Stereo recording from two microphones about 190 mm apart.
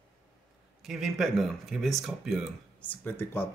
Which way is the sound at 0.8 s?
Centre (ahead or behind).